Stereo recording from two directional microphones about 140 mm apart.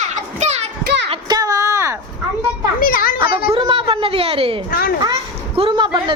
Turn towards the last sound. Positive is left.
turn(degrees=-35)  # may be behind; listen again after turning